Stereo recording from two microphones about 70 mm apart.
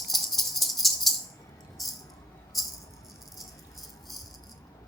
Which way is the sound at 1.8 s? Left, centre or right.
Centre.